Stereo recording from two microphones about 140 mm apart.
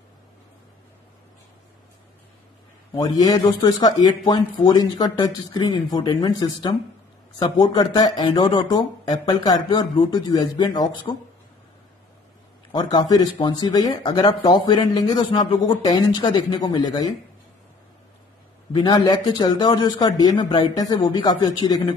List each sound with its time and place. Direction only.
2.9 s speech: 30° left (ahead or behind)
13.1 s speech: 30° left (ahead or behind)
18.7 s speech: 30° left (ahead or behind)